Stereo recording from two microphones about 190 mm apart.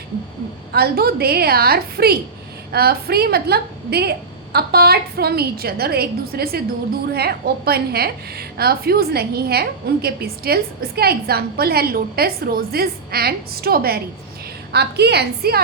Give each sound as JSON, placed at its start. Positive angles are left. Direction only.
{"t": 0.7, "sound": "a woman's voice", "side_deg": -55}